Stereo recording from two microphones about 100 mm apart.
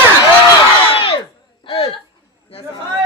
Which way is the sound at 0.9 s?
65° left (ahead or behind).